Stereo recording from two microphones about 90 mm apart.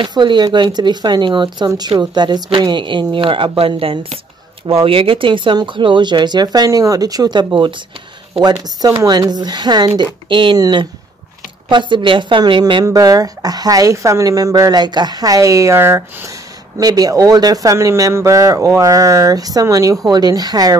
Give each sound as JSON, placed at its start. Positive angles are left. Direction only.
{"t": 0.0, "sound": "speech", "side_deg": -55}
{"t": 1.7, "sound": "speech", "side_deg": -50}
{"t": 10.2, "sound": "speech", "side_deg": -65}
{"t": 12.8, "sound": "a man's voice", "side_deg": -40}
{"t": 16.8, "sound": "a man's voice", "side_deg": -45}